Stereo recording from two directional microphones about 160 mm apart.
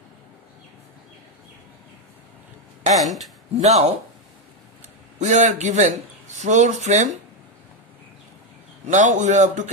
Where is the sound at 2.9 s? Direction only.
Centre (ahead or behind).